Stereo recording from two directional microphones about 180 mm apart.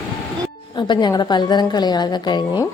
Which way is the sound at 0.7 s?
25° left (ahead or behind).